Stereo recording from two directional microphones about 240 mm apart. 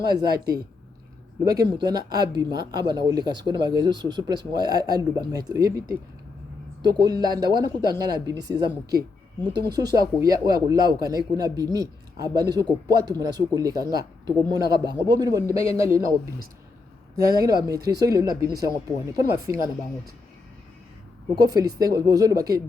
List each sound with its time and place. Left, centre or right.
0.0 s speech: centre
1.5 s speech: centre
6.8 s speech: centre
21.3 s speech: centre